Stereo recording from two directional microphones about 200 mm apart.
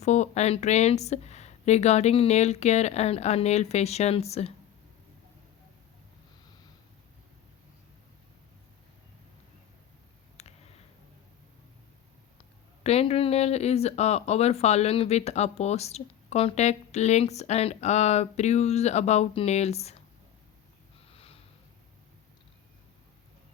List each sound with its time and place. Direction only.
0.0 s speech: 35° left (ahead or behind)
10.4 s a sound: 30° left (ahead or behind)
12.4 s speech: 30° left (ahead or behind)
21.1 s sniff: 30° left (ahead or behind)